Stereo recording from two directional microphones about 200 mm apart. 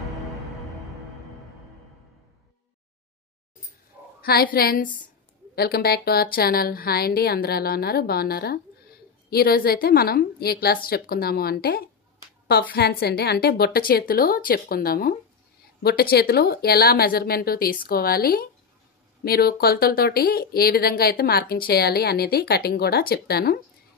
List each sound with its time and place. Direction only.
0.0 s music: centre (ahead or behind)
4.2 s speech: 50° left (ahead or behind)